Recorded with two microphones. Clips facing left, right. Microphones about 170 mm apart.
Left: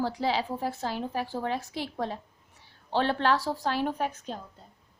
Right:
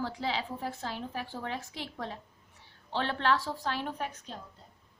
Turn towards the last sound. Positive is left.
turn(degrees=40)  # may be behind; listen again after turning